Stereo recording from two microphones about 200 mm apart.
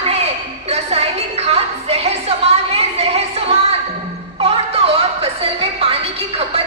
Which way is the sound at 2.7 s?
30° right (ahead or behind).